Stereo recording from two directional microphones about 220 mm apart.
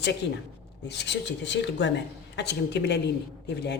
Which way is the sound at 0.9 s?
50° left (ahead or behind).